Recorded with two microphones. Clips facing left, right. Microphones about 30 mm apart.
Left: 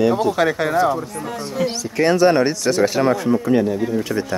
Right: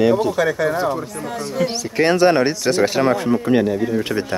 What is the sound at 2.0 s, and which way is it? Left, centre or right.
Speech, right.